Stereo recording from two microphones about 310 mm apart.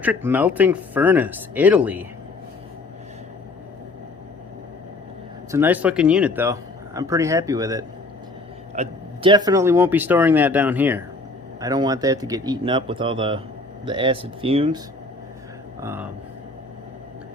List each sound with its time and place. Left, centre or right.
0.0 s speech: centre
5.5 s speech: centre
15.8 s speech: centre